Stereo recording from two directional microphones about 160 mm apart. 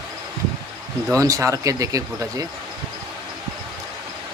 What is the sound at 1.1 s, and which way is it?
Speech, 20° right (ahead or behind).